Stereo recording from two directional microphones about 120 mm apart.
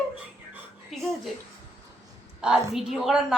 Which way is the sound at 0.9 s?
Centre (ahead or behind).